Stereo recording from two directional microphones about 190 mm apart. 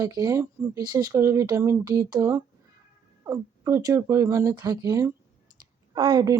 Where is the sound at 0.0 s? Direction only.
20° right (ahead or behind).